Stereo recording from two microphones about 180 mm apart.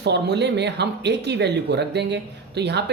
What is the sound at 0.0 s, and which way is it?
Speech, 70° right (ahead or behind).